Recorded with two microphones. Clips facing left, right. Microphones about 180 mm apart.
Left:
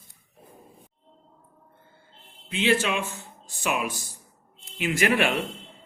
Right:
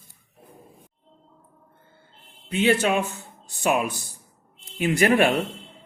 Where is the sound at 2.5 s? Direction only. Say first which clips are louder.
Right 3 dB; 40° right (ahead or behind).